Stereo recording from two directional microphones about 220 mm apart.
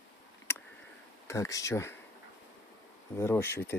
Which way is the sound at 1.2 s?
15° left (ahead or behind).